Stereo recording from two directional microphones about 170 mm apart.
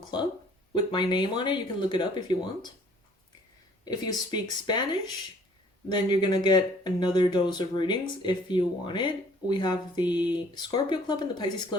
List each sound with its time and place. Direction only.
0.7 s speech: 30° left (ahead or behind)
3.8 s speech: 25° left (ahead or behind)